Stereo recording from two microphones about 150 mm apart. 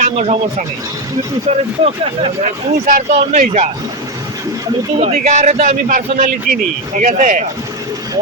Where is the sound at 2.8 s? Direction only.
65° right (ahead or behind).